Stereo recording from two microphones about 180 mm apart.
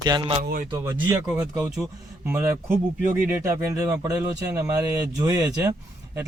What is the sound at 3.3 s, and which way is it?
A man's voice, 15° right (ahead or behind).